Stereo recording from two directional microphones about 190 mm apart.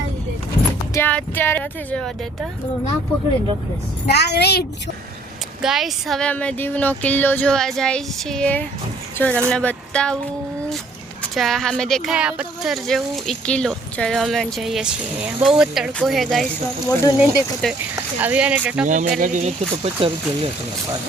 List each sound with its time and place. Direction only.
0.9 s speech: 10° left (ahead or behind)
4.0 s a woman's voice: 60° left (ahead or behind)
5.6 s speech: centre (ahead or behind)
11.2 s speech: centre (ahead or behind)
16.8 s speech: 15° left (ahead or behind)
17.2 s speech: centre (ahead or behind)
18.9 s speech: 40° right (ahead or behind)